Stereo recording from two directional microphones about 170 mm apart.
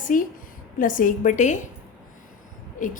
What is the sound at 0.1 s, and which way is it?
A woman's voice, 50° left (ahead or behind).